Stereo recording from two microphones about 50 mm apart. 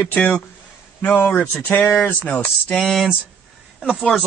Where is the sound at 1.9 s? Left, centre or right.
Left.